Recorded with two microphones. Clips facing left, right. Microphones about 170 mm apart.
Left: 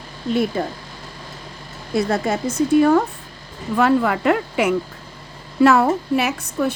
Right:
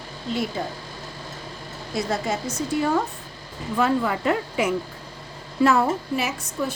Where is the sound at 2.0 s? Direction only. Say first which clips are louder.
Left 6 dB; 60° left (ahead or behind).